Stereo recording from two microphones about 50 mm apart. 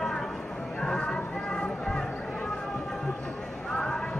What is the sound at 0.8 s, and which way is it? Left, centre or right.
Speech, centre.